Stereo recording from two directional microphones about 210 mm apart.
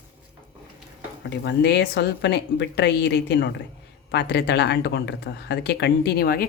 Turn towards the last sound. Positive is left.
turn(degrees=45)  # may be behind; listen again after turning